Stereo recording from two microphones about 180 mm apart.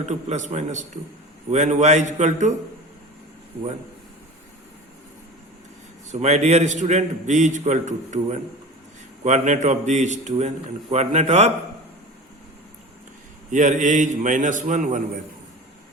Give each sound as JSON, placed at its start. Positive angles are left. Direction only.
{"t": 0.0, "sound": "a man's voice", "side_deg": -40}
{"t": 6.1, "sound": "a man's voice", "side_deg": -40}
{"t": 13.5, "sound": "a man's voice", "side_deg": -45}